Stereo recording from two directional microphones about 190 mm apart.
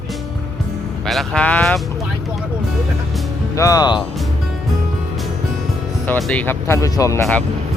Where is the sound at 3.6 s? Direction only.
20° left (ahead or behind).